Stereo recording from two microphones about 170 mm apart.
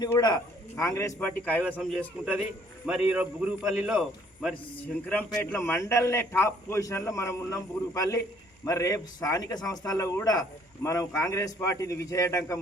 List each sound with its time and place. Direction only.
0.0 s a man's voice: 25° left (ahead or behind); by 4.5 s centre (ahead or behind)
5.0 s a man's voice: 10° left (ahead or behind)